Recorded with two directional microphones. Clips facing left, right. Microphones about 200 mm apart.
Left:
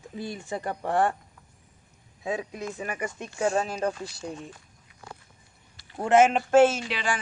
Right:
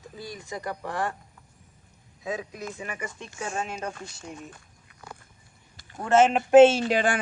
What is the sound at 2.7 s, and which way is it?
Speech, 40° left (ahead or behind).